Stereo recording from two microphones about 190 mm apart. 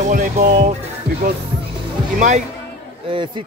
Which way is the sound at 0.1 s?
45° right (ahead or behind).